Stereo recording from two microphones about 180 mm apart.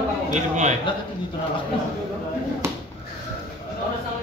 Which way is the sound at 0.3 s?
40° right (ahead or behind).